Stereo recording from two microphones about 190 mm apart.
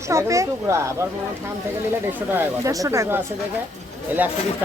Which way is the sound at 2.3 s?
15° right (ahead or behind).